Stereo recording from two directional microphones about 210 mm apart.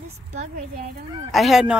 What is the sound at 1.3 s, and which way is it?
Speech, centre (ahead or behind).